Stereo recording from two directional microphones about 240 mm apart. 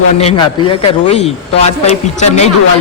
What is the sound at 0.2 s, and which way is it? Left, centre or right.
A man's voice, left.